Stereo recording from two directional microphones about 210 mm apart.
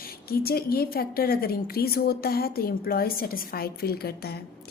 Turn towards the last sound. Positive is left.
turn(degrees=50)  # may be behind; listen again after turning